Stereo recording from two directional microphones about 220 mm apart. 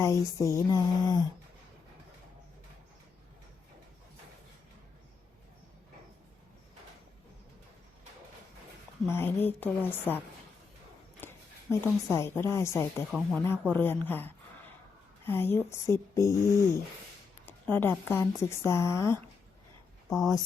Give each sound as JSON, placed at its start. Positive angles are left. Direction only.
{"t": 0.0, "sound": "speech", "side_deg": 15}
{"t": 9.0, "sound": "speech", "side_deg": 10}
{"t": 11.2, "sound": "a woman's voice", "side_deg": 10}
{"t": 13.1, "sound": "speech", "side_deg": 0}
{"t": 13.7, "sound": "speech", "side_deg": 10}
{"t": 17.4, "sound": "a sound", "side_deg": 10}
{"t": 18.1, "sound": "speech", "side_deg": 10}
{"t": 20.1, "sound": "speech", "side_deg": 0}